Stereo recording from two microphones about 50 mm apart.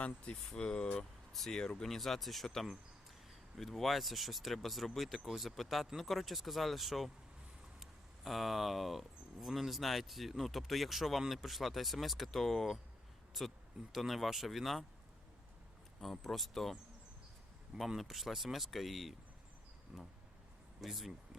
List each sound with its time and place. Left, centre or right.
0.0 s speech: left
0.9 s speech: centre
16.0 s speech: centre
17.7 s speech: centre
19.9 s insect: centre
20.8 s speech: centre